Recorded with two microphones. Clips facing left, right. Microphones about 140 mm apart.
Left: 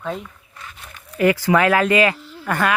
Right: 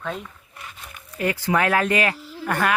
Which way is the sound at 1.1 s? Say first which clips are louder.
Left 6 dB; 90° left.